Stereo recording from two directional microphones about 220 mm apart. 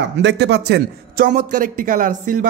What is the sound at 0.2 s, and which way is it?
A man's voice, 50° right (ahead or behind).